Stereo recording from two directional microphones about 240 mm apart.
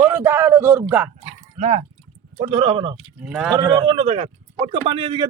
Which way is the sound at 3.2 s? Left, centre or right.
Centre.